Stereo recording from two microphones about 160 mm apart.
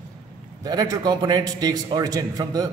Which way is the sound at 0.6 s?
25° right (ahead or behind).